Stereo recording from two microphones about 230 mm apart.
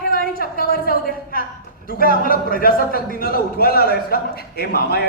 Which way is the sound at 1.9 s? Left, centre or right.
Left.